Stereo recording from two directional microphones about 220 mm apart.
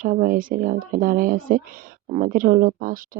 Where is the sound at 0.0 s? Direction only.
35° right (ahead or behind).